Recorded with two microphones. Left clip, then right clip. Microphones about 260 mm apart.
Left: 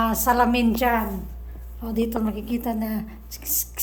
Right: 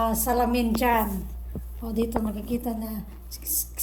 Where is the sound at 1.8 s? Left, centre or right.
Centre.